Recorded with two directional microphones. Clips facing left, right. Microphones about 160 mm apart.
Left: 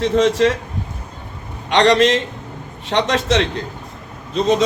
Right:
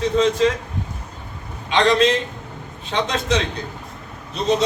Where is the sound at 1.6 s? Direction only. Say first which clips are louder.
Left 3 dB; 75° left (ahead or behind).